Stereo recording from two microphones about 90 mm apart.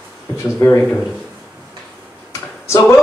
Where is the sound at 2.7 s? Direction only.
30° left (ahead or behind).